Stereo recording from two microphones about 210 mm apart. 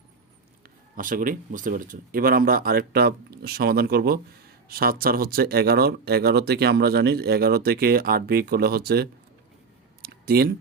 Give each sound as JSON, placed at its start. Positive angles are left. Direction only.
{"t": 0.9, "sound": "speech", "side_deg": -40}
{"t": 10.0, "sound": "clicking", "side_deg": -45}